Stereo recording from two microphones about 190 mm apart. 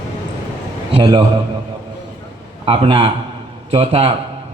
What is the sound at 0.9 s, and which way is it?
Speech, 25° right (ahead or behind).